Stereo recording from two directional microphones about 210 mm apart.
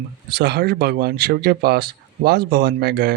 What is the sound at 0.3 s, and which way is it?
Speech, 50° right (ahead or behind).